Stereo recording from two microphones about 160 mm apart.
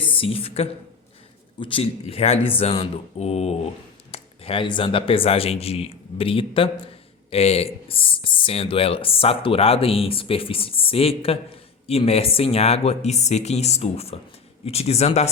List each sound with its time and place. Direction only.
0.0 s a woman's voice: 35° left (ahead or behind)